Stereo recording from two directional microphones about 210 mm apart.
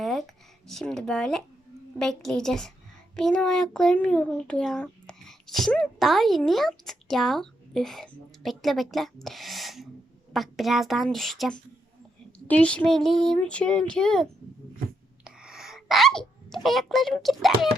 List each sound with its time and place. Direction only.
0.0 s a sound: centre (ahead or behind)
0.7 s a child's voice: centre (ahead or behind)
15.2 s sneeze: 5° right (ahead or behind)